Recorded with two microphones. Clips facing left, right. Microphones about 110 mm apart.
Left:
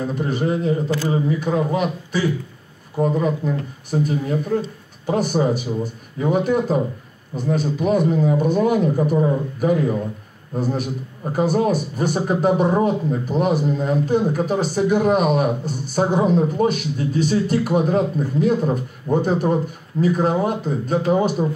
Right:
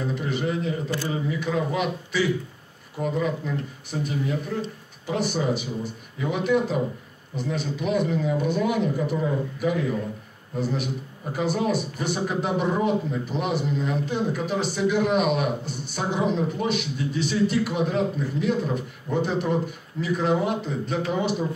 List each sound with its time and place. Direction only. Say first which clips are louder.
0.1 s speech: left 5 dB; 40° left (ahead or behind)